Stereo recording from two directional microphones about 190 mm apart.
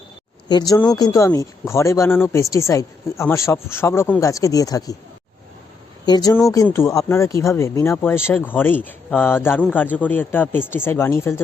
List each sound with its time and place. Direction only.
0.7 s speech: 20° left (ahead or behind)
6.1 s speech: 20° left (ahead or behind)